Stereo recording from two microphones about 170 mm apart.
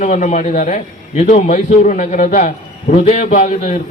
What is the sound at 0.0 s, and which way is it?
A man's voice, 45° left (ahead or behind).